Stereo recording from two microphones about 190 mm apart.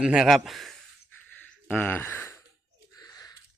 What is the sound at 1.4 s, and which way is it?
Gasp, 5° left (ahead or behind).